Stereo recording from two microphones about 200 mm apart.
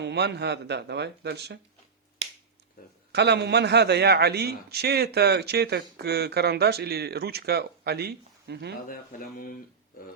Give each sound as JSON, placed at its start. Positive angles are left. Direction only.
{"t": 0.0, "sound": "speech", "side_deg": -60}
{"t": 3.1, "sound": "a man's voice", "side_deg": -55}
{"t": 8.9, "sound": "speech", "side_deg": 45}